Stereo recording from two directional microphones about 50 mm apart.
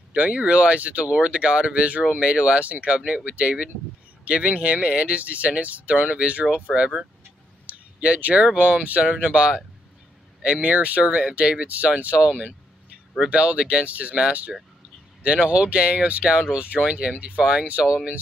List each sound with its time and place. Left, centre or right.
0.1 s speech: right
7.6 s a sound: right
8.5 s speech: right
15.2 s speech: right